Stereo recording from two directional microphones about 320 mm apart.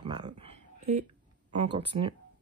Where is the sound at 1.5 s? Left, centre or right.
Centre.